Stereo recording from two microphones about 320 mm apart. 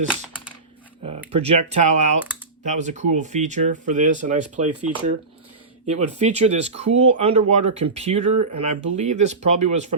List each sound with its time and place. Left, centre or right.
1.0 s speech: centre
5.8 s speech: right